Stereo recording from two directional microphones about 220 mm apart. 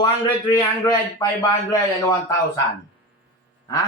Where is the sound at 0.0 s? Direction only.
20° left (ahead or behind).